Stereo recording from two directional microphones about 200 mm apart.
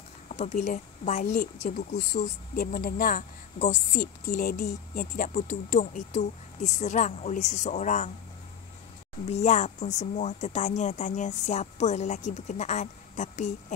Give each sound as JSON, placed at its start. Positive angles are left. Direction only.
{"t": 0.3, "sound": "speech", "side_deg": 35}
{"t": 9.3, "sound": "speech", "side_deg": 35}